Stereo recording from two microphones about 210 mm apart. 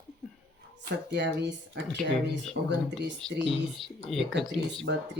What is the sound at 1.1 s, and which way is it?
A woman's voice, 55° right (ahead or behind).